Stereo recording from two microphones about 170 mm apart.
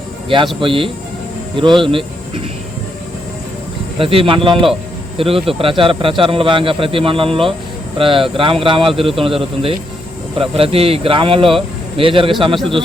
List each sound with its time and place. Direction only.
0.6 s a man's voice: 30° right (ahead or behind)
3.9 s a man's voice: 30° right (ahead or behind)